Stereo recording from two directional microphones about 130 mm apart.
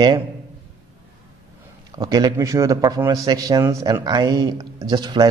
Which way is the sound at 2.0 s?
30° right (ahead or behind).